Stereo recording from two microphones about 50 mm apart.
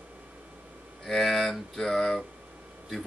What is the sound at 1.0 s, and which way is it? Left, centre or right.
Speech, centre.